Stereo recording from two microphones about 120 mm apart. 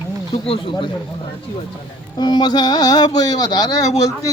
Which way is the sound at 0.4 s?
50° left (ahead or behind).